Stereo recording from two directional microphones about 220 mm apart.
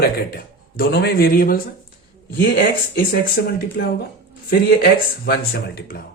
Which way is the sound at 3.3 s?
45° left (ahead or behind).